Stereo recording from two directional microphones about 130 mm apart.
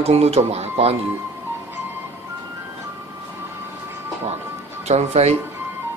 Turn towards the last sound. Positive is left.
turn(degrees=-55)  # may be behind; listen again after turning